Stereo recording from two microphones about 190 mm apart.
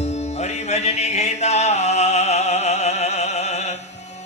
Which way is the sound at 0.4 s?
35° left (ahead or behind).